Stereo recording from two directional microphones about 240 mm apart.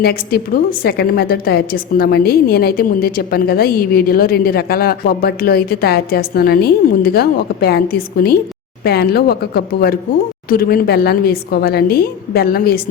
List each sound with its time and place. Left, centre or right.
0.0 s a woman's voice: left